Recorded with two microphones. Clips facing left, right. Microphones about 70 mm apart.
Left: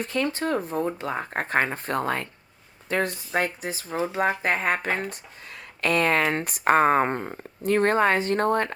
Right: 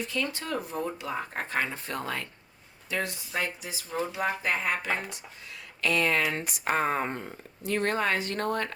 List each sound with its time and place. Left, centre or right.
0.0 s speech: left